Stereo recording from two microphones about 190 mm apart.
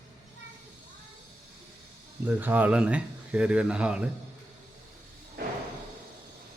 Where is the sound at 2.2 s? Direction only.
10° right (ahead or behind).